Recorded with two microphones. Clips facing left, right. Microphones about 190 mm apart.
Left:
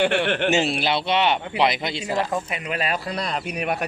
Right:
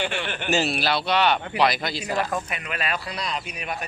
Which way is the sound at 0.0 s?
65° left (ahead or behind).